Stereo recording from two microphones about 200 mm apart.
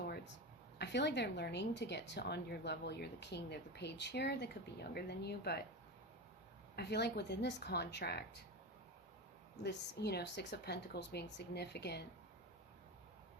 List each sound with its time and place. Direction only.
0.8 s a woman's voice: 60° left (ahead or behind)
6.7 s a woman's voice: 55° left (ahead or behind)
9.6 s a woman's voice: 55° left (ahead or behind)